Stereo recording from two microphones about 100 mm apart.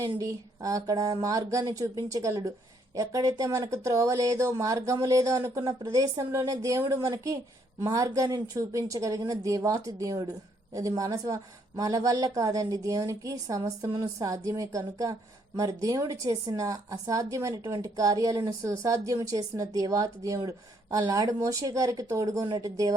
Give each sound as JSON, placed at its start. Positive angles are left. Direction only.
{"t": 0.0, "sound": "a woman's voice", "side_deg": -35}